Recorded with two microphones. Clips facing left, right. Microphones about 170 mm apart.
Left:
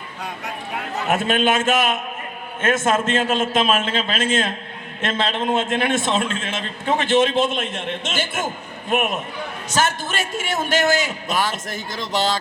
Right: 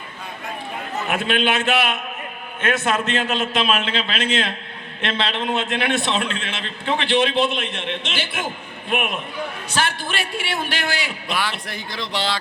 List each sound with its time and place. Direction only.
1.0 s a man's voice: 45° left (ahead or behind)